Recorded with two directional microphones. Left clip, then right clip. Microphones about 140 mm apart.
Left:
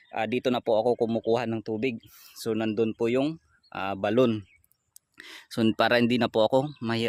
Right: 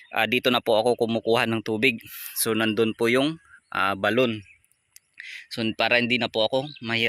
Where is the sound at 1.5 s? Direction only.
10° right (ahead or behind).